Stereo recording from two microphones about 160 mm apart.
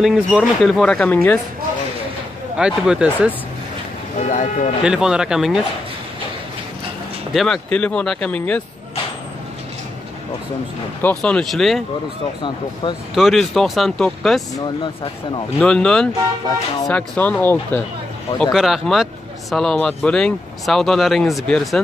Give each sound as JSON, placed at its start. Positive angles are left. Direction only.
{"t": 0.0, "sound": "speech", "side_deg": 0}
{"t": 2.5, "sound": "speech", "side_deg": -5}
{"t": 4.2, "sound": "speech", "side_deg": 50}
{"t": 4.8, "sound": "speech", "side_deg": -5}
{"t": 7.3, "sound": "speech", "side_deg": 5}
{"t": 11.0, "sound": "speech", "side_deg": 10}
{"t": 13.1, "sound": "speech", "side_deg": 0}
{"t": 15.6, "sound": "speech", "side_deg": 5}
{"t": 18.4, "sound": "speech", "side_deg": 0}